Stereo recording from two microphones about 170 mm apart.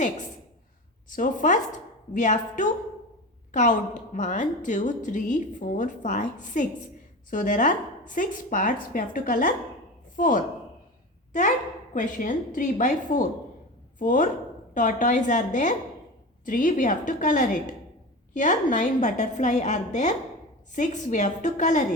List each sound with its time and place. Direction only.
1.1 s a woman's voice: 50° left (ahead or behind)
11.9 s a woman's voice: 50° left (ahead or behind)